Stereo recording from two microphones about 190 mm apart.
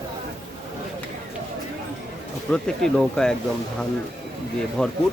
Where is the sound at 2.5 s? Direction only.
5° left (ahead or behind).